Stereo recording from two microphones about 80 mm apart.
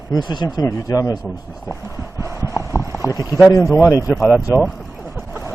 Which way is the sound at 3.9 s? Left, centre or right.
Left.